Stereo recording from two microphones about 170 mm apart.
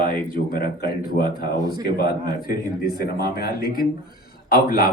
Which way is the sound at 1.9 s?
65° left (ahead or behind).